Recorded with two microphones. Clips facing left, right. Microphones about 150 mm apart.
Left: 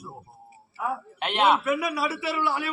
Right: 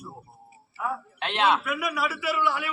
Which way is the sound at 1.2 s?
15° left (ahead or behind).